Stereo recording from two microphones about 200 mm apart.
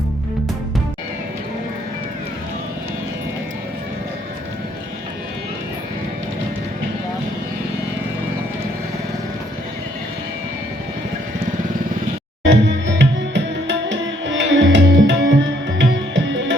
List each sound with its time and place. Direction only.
12.5 s tabla: 65° right (ahead or behind)
15.8 s music: 65° right (ahead or behind)